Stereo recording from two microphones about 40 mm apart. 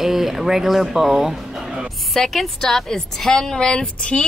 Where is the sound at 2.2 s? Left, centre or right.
Centre.